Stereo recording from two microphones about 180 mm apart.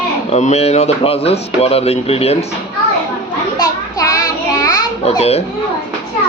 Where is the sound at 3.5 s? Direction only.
20° left (ahead or behind).